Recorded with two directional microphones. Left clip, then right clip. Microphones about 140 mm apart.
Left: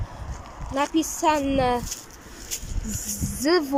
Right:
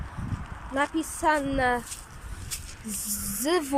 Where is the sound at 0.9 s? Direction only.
15° left (ahead or behind).